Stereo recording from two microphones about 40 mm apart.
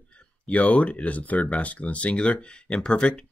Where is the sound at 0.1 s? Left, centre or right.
Left.